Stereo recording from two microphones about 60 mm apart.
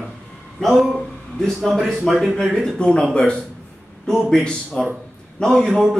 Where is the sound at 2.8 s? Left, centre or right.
Centre.